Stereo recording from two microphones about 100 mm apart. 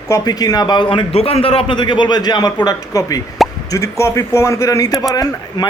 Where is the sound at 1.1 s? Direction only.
80° left.